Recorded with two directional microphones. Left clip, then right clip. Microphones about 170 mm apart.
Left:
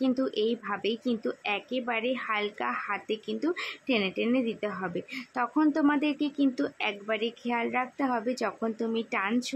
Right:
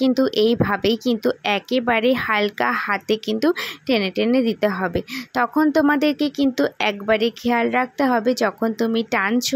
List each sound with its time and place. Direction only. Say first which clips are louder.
0.0 s speech: right 10 dB; 40° right (ahead or behind)